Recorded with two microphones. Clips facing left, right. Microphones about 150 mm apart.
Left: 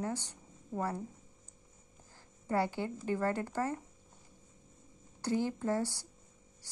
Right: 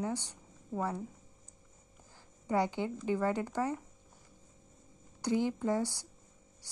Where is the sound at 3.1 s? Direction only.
15° right (ahead or behind).